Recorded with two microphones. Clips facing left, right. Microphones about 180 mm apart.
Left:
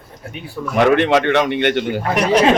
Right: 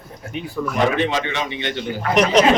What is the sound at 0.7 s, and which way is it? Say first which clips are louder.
A man's voice: left 7 dB; 65° left (ahead or behind).